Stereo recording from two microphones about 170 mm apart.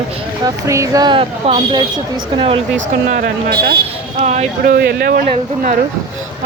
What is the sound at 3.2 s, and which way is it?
Speech, 65° right (ahead or behind).